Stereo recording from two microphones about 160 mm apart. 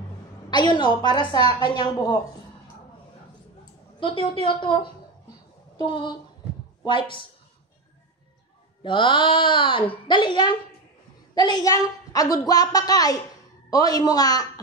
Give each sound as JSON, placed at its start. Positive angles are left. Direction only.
{"t": 0.5, "sound": "a woman's voice", "side_deg": 30}
{"t": 4.0, "sound": "a woman's voice", "side_deg": 35}
{"t": 8.8, "sound": "a woman's voice", "side_deg": 30}